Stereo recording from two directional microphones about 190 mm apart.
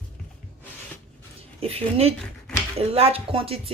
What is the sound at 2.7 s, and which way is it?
Speech, 35° right (ahead or behind).